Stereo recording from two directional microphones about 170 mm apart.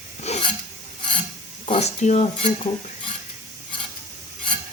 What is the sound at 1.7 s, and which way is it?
Speech, 40° left (ahead or behind).